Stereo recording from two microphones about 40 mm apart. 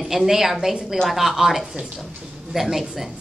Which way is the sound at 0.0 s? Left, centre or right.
Centre.